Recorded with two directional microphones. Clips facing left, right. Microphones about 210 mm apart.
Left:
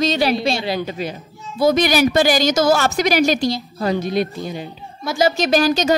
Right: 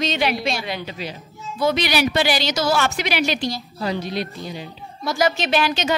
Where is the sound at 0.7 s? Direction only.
45° left (ahead or behind).